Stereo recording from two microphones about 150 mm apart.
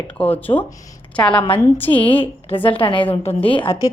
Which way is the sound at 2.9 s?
10° left (ahead or behind).